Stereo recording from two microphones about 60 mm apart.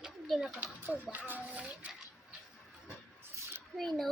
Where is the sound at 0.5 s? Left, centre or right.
Right.